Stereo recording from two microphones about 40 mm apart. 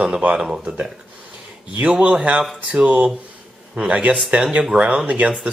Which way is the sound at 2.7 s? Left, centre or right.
Right.